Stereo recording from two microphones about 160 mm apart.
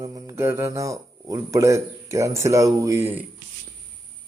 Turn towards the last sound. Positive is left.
turn(degrees=-15)  # may be behind; listen again after turning